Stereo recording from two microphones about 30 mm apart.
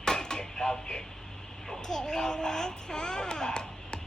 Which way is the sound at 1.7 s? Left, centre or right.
Centre.